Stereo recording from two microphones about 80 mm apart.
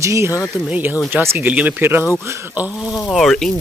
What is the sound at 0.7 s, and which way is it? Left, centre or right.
Speech, centre.